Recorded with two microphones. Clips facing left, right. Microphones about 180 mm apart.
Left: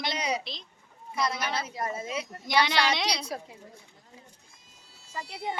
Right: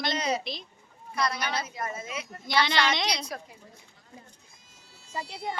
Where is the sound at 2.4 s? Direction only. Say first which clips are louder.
Even; 15° left (ahead or behind).